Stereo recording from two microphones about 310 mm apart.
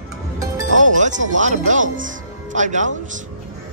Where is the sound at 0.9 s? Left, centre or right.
Right.